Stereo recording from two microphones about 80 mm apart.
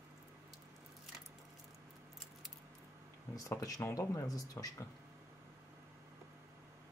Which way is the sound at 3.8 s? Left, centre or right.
Left.